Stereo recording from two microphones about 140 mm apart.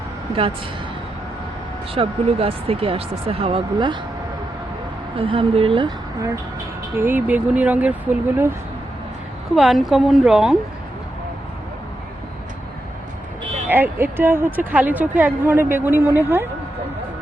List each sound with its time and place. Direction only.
2.0 s speech: 45° right (ahead or behind)
5.1 s speech: 40° right (ahead or behind)
7.0 s speech: 15° right (ahead or behind)
9.6 s speech: centre (ahead or behind)
13.7 s speech: 15° right (ahead or behind)